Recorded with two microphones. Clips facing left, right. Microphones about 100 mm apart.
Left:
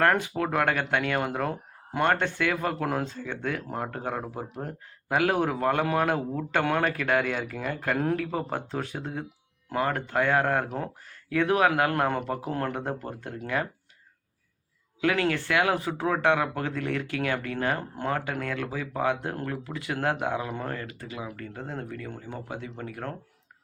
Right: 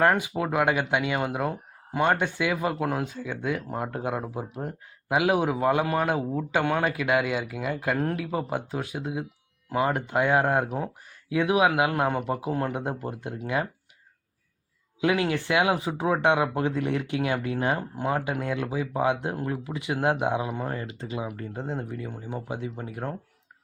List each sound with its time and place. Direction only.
0.0 s speech: 10° right (ahead or behind)
15.0 s speech: 15° right (ahead or behind)